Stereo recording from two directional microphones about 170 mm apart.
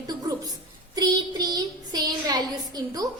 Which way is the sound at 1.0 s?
25° right (ahead or behind).